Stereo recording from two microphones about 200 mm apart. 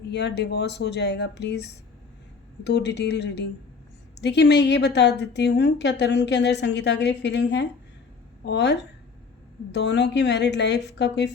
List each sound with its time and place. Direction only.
0.1 s a woman's voice: 60° left (ahead or behind)